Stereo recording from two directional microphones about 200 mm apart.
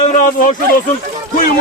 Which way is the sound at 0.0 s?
35° left (ahead or behind).